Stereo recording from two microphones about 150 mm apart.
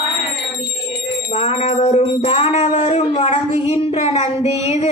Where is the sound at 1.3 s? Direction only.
45° left (ahead or behind).